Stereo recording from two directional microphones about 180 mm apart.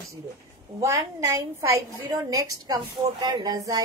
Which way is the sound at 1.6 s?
15° right (ahead or behind).